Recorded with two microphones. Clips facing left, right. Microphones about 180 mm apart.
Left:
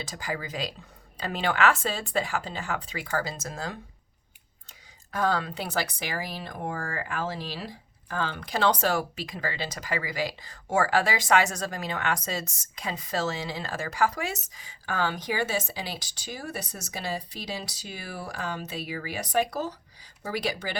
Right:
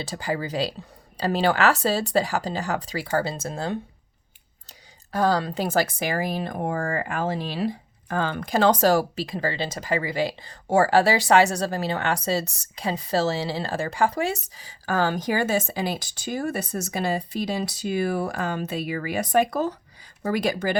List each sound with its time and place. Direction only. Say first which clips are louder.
0.0 s a woman's voice: right 6 dB; 30° right (ahead or behind)
5.1 s speech: right 5 dB; 35° right (ahead or behind)